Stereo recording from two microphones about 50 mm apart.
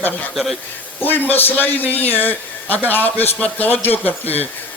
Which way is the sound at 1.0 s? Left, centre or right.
Left.